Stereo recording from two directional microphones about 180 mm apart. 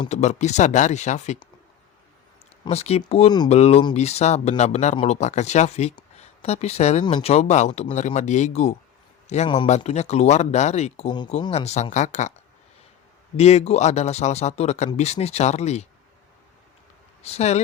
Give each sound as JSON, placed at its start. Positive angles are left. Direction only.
{"t": 0.1, "sound": "speech", "side_deg": 40}
{"t": 2.6, "sound": "speech", "side_deg": 35}
{"t": 13.3, "sound": "speech", "side_deg": 35}
{"t": 17.2, "sound": "speech", "side_deg": 35}